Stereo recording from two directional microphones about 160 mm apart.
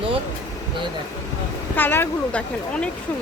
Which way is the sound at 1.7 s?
15° left (ahead or behind).